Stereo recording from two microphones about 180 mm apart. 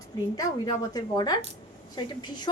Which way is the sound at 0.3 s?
20° left (ahead or behind).